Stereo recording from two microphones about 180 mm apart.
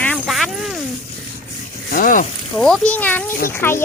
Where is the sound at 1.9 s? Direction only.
50° left (ahead or behind).